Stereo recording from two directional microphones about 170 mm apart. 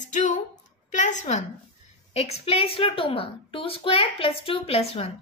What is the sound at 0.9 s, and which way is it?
A woman's voice, 45° left (ahead or behind).